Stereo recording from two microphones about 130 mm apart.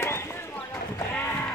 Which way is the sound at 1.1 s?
15° left (ahead or behind).